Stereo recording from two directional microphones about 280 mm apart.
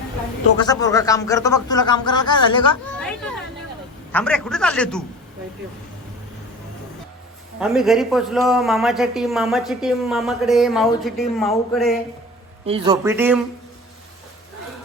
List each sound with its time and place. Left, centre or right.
0.6 s speech: centre
3.0 s a sound: centre
4.1 s a man's voice: centre
7.6 s a man's voice: centre
12.6 s speech: centre